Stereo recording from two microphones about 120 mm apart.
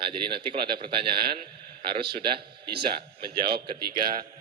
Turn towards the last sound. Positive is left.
turn(degrees=-35)  # may be behind; listen again after turning